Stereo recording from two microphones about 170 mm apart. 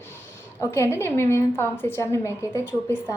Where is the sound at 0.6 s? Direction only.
15° left (ahead or behind).